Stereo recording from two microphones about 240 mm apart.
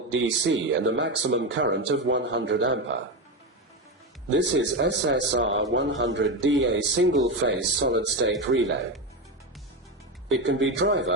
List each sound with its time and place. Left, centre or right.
0.1 s a man's voice: right
4.4 s a man's voice: right
10.4 s a man's voice: right